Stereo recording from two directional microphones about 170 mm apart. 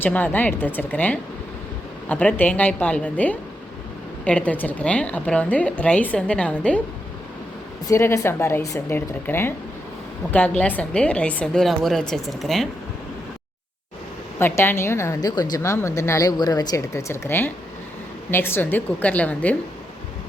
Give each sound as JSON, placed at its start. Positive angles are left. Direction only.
{"t": 0.0, "sound": "a woman's voice", "side_deg": 10}
{"t": 7.9, "sound": "a woman's voice", "side_deg": 15}
{"t": 10.6, "sound": "a woman's voice", "side_deg": 10}
{"t": 14.3, "sound": "a woman's voice", "side_deg": 15}